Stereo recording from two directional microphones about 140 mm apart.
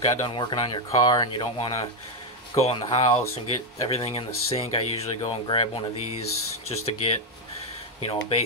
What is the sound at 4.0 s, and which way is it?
Speech, 45° left (ahead or behind).